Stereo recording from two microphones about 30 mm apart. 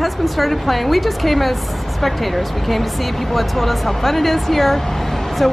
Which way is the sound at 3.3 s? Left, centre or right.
Centre.